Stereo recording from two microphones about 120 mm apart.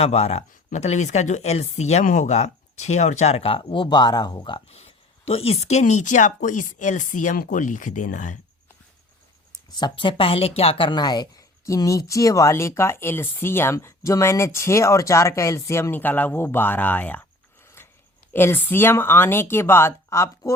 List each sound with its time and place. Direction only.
0.0 s speech: 60° left (ahead or behind); by 4.6 s 40° left (ahead or behind)
4.7 s speech: 60° left (ahead or behind); by 8.4 s 90° left
9.7 s speech: 40° left (ahead or behind); by 17.2 s 15° left (ahead or behind)
17.8 s a sound: 20° left (ahead or behind)
18.3 s speech: 15° left (ahead or behind)